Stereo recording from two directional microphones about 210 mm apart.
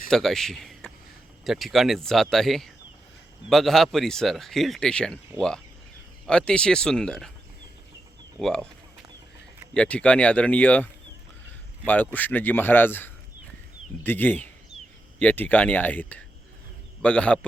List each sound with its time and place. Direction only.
0.1 s speech: centre (ahead or behind)
8.4 s speech: centre (ahead or behind)
9.7 s speech: 5° left (ahead or behind)
11.9 s speech: 10° left (ahead or behind)